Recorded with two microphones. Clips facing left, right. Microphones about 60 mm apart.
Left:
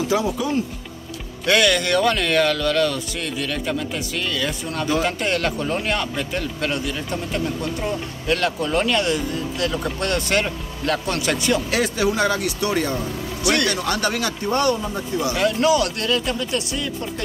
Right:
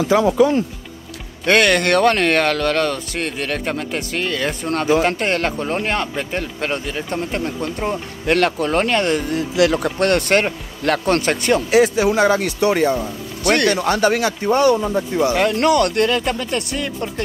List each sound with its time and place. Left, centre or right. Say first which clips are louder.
0.2 s speech: right 8 dB; right
1.4 s speech: right 3 dB; right
9.3 s speech: right 7 dB; right
9.8 s speech: right 6 dB; right
11.7 s speech: right 6 dB; centre
13.4 s speech: right 5 dB; right
13.8 s speech: right 6 dB; right
15.5 s speech: right 3 dB; right